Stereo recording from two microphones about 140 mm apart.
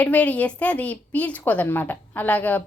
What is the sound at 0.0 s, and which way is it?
Speech, 10° left (ahead or behind).